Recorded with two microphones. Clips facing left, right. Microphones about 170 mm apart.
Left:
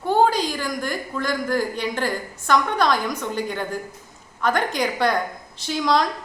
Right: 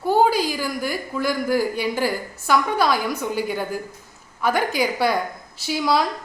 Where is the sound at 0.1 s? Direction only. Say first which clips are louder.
Right 1 dB; 10° right (ahead or behind).